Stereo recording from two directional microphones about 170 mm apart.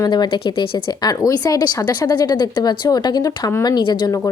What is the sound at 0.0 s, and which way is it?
A woman's voice, 25° left (ahead or behind).